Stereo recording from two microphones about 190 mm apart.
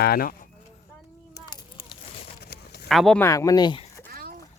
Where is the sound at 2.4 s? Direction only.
55° left (ahead or behind).